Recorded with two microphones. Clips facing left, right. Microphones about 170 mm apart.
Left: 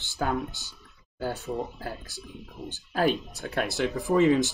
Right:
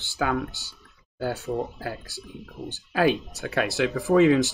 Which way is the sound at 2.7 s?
80° right.